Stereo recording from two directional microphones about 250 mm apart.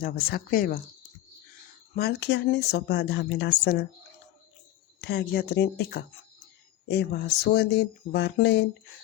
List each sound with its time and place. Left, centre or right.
0.0 s speech: left
2.0 s speech: left
4.9 s speech: left